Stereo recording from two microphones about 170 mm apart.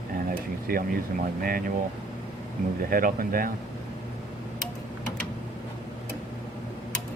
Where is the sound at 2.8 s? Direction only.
55° right (ahead or behind).